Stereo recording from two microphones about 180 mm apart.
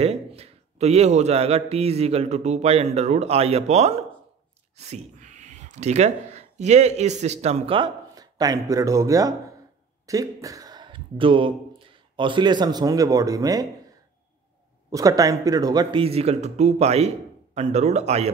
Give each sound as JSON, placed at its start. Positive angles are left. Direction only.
{"t": 0.0, "sound": "speech", "side_deg": -35}
{"t": 14.9, "sound": "speech", "side_deg": -20}